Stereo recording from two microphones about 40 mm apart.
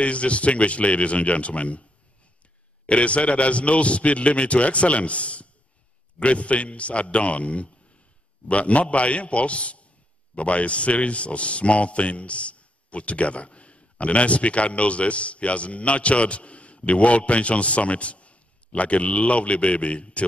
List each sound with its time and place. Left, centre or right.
0.0 s a man's voice: left
2.9 s a man's voice: left